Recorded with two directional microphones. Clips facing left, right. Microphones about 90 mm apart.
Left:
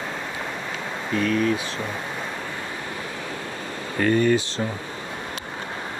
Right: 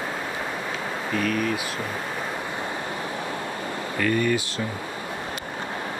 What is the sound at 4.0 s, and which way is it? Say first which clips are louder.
Speech: left 4 dB; 35° left (ahead or behind).